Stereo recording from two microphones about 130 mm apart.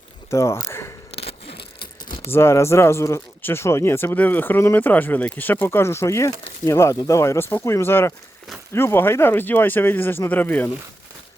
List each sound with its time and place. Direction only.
0.3 s speech: 20° left (ahead or behind)
1.1 s a sound: 50° left (ahead or behind)
2.2 s speech: 20° left (ahead or behind)